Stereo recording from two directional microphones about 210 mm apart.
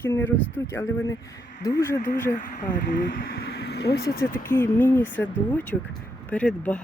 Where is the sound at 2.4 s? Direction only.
40° left (ahead or behind).